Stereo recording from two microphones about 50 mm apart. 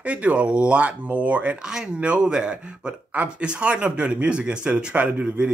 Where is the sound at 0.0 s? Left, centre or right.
Right.